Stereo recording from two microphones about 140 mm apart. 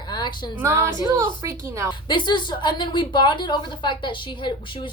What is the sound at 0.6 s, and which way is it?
A woman's voice, 15° right (ahead or behind).